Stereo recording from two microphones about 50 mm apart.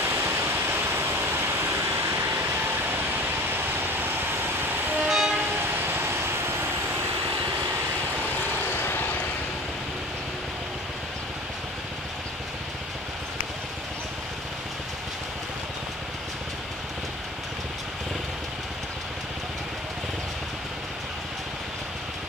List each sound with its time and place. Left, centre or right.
0.0 s waterfall: right
1.7 s waves: right
2.4 s vehicle: right
5.0 s vehicle: centre
5.6 s vehicle: right